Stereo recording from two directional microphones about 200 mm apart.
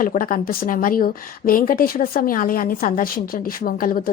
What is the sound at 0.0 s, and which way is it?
Speech, 45° left (ahead or behind).